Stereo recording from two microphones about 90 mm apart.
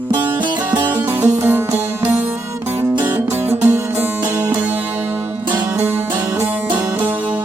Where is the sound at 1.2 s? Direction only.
25° right (ahead or behind).